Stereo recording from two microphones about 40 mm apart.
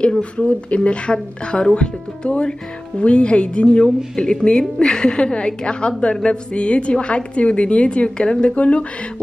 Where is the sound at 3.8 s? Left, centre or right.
Centre.